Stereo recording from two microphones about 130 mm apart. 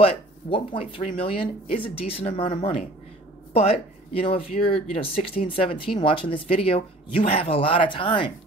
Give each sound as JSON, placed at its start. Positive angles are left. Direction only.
{"t": 0.0, "sound": "speech", "side_deg": 45}